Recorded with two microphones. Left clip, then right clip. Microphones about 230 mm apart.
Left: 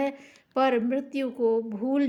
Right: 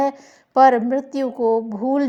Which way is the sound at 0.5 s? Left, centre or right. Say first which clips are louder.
Right 10 dB; right.